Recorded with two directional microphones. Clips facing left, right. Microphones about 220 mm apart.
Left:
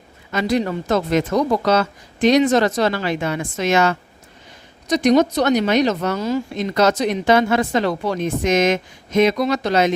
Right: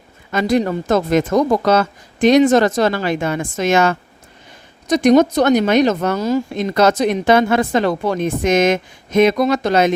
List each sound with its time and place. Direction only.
0.3 s speech: 50° right (ahead or behind)